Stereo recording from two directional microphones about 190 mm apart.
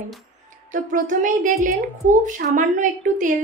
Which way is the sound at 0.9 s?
45° right (ahead or behind).